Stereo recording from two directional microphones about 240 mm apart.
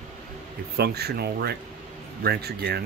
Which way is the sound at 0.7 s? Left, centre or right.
Right.